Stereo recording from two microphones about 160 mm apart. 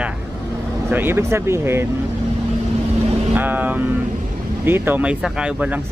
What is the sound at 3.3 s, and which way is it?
Speech, 10° right (ahead or behind).